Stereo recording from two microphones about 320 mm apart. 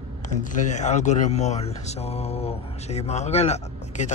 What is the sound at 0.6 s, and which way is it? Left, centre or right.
Speech, left.